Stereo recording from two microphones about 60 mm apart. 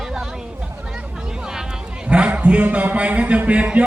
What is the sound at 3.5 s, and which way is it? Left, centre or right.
Speech, right.